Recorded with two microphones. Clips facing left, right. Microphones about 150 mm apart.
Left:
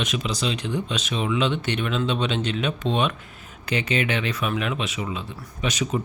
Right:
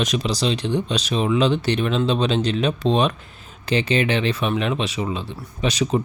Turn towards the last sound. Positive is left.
turn(degrees=-35)  # may be behind; listen again after turning